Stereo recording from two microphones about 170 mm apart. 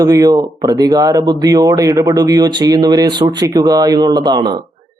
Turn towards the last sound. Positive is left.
turn(degrees=-25)  # may be behind; listen again after turning